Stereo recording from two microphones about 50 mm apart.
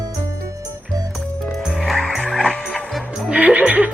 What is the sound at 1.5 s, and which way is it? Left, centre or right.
Frog, centre.